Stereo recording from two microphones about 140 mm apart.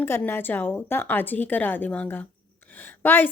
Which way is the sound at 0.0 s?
15° left (ahead or behind).